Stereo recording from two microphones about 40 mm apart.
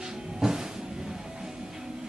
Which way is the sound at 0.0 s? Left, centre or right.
Centre.